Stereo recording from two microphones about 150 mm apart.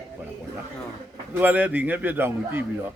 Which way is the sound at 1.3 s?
10° right (ahead or behind).